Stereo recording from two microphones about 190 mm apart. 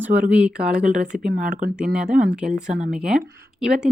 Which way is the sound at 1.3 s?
45° right (ahead or behind).